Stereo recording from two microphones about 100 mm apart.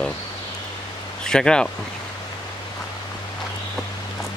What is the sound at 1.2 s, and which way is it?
Speech, 5° left (ahead or behind).